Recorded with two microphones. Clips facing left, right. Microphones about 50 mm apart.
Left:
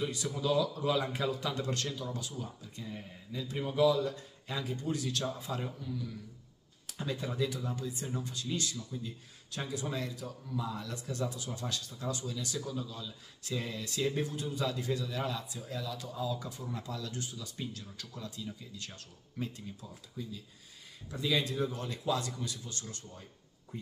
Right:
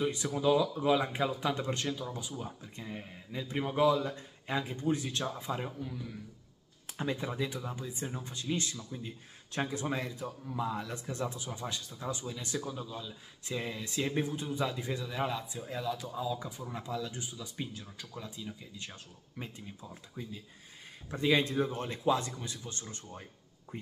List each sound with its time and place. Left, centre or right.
0.0 s a man's voice: right
23.7 s quack: right